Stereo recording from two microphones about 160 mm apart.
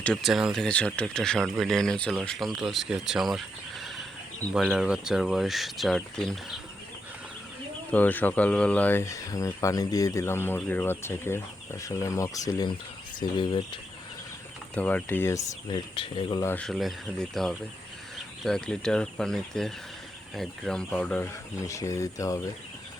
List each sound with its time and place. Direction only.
0.0 s speech: centre (ahead or behind)
7.9 s speech: 10° left (ahead or behind); by 13.7 s 30° left (ahead or behind)
14.8 s speech: 10° left (ahead or behind)
16.0 s speech: 35° left (ahead or behind)
16.4 s speech: 15° left (ahead or behind)
16.6 s speech: centre (ahead or behind)
21.6 s speech: 20° left (ahead or behind)